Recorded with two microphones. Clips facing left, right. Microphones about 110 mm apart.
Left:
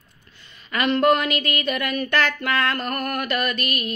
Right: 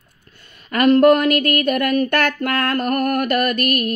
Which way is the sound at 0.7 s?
50° right (ahead or behind).